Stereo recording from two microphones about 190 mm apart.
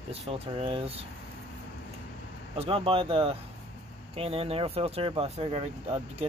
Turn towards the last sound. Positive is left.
turn(degrees=-30)  # may be behind; listen again after turning